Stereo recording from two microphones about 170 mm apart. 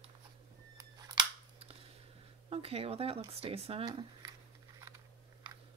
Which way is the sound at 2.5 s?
35° right (ahead or behind).